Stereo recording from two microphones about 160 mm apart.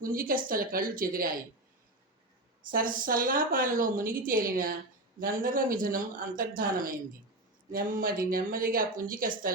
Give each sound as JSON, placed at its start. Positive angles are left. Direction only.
{"t": 0.0, "sound": "a woman's voice", "side_deg": -60}
{"t": 2.6, "sound": "a woman's voice", "side_deg": -60}